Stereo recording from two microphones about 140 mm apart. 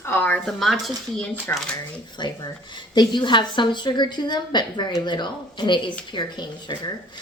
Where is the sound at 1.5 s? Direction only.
15° left (ahead or behind).